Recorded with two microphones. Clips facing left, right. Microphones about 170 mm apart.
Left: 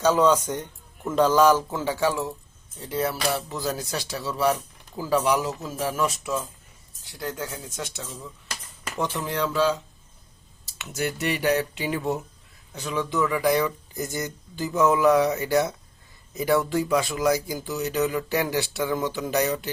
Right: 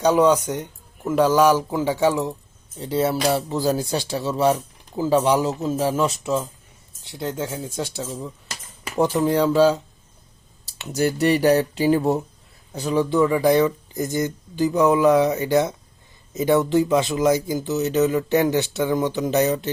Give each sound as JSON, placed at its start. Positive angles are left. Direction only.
{"t": 0.0, "sound": "a man's voice", "side_deg": -15}